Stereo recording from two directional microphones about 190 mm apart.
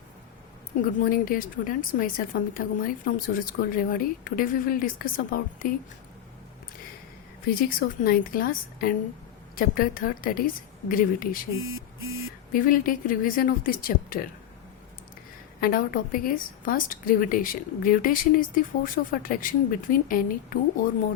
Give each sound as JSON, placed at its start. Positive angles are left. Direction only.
{"t": 0.7, "sound": "a woman's voice", "side_deg": 40}
{"t": 7.4, "sound": "a woman's voice", "side_deg": 50}
{"t": 12.5, "sound": "a woman's voice", "side_deg": 45}
{"t": 15.6, "sound": "a woman's voice", "side_deg": 50}